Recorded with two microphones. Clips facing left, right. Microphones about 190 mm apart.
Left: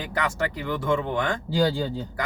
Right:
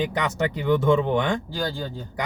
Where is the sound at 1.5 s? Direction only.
15° left (ahead or behind).